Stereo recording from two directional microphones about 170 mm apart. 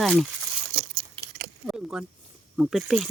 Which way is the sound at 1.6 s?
Centre (ahead or behind).